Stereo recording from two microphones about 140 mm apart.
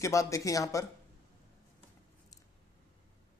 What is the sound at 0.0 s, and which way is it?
Speech, 20° left (ahead or behind).